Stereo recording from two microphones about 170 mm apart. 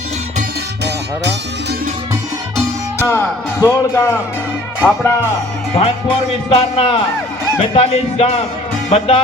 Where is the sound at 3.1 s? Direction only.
15° left (ahead or behind).